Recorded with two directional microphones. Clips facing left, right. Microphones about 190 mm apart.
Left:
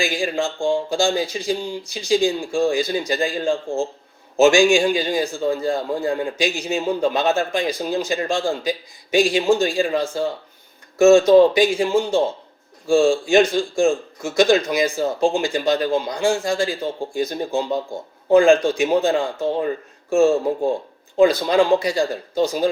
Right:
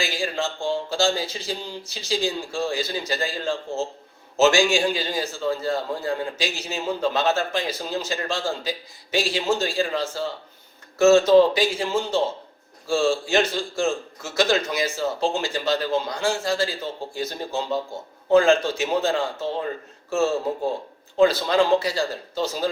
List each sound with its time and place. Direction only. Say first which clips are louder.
0.0 s a man's voice: left 4 dB; 15° left (ahead or behind)